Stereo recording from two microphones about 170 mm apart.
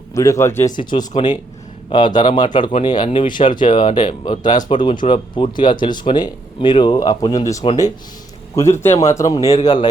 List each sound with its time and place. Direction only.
0.1 s speech: 20° left (ahead or behind)
0.8 s speech: 25° left (ahead or behind)
8.5 s speech: 15° left (ahead or behind)